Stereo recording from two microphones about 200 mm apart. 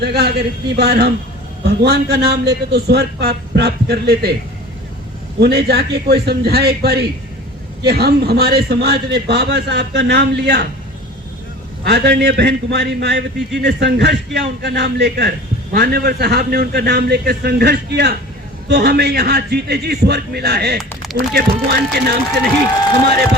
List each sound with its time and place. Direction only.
0.0 s a man's voice: 55° right (ahead or behind)
5.4 s a man's voice: 55° right (ahead or behind)
11.9 s a man's voice: 55° right (ahead or behind)
20.7 s a sound: centre (ahead or behind)
21.3 s a man's voice: 55° right (ahead or behind)